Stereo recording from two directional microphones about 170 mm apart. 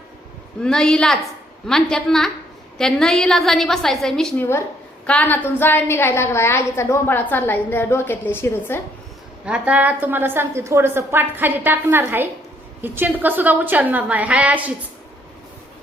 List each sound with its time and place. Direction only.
0.6 s a woman's voice: 5° left (ahead or behind)
9.5 s a woman's voice: 10° right (ahead or behind)